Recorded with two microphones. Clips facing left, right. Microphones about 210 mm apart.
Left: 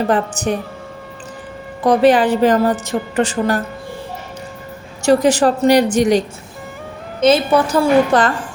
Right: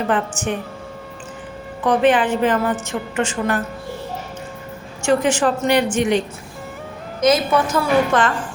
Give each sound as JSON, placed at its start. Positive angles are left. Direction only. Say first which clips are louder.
{"t": 0.1, "sound": "a woman's voice", "louder": "left 4 dB", "side_deg": 35}
{"t": 1.8, "sound": "a woman's voice", "louder": "left 4 dB", "side_deg": 35}
{"t": 5.0, "sound": "a woman's voice", "louder": "left 4 dB", "side_deg": 35}